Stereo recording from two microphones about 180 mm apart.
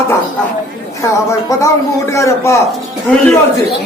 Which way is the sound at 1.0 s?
20° left (ahead or behind).